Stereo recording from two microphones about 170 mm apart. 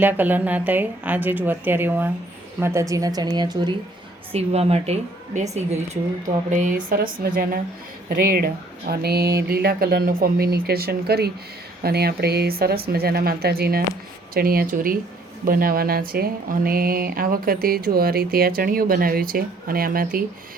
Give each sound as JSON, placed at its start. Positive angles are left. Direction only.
{"t": 0.0, "sound": "a woman's voice", "side_deg": -10}
{"t": 4.3, "sound": "speech", "side_deg": -35}
{"t": 6.5, "sound": "speech", "side_deg": -50}
{"t": 8.9, "sound": "speech", "side_deg": -65}